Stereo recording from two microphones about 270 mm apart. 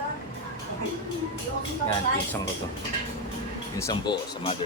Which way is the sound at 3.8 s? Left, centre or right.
Centre.